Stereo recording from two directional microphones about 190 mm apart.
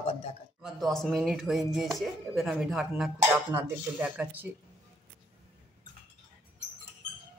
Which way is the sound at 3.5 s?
10° right (ahead or behind).